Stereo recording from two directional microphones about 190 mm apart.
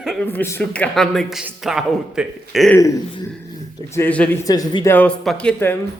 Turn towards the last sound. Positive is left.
turn(degrees=10)  # may be behind; listen again after turning